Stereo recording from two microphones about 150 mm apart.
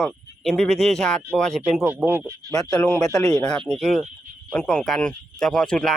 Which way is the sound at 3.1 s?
20° left (ahead or behind).